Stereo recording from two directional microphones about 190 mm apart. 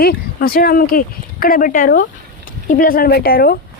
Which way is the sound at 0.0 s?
50° left (ahead or behind).